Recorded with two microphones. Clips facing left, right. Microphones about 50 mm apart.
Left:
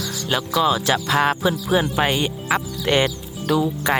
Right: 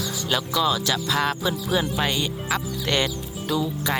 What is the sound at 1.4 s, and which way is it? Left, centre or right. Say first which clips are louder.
Speech: left 4 dB; centre.